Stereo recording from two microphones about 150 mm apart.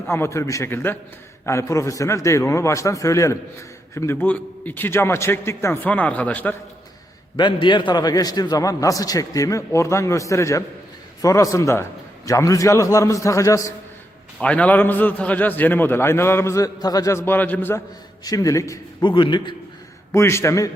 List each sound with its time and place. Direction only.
0.1 s a man's voice: 20° left (ahead or behind)
7.3 s a man's voice: 30° left (ahead or behind)
14.4 s a man's voice: 10° left (ahead or behind)
19.0 s a man's voice: 35° left (ahead or behind)
20.1 s a man's voice: 15° left (ahead or behind)